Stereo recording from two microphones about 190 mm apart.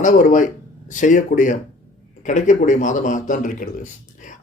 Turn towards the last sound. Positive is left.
turn(degrees=40)  # may be behind; listen again after turning